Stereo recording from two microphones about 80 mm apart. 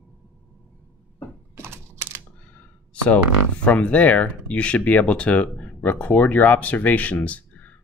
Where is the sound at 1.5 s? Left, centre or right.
Right.